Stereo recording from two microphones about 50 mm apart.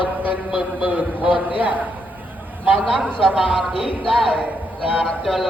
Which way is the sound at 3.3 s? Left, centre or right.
Centre.